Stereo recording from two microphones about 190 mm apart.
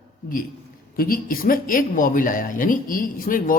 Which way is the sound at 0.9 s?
50° left (ahead or behind).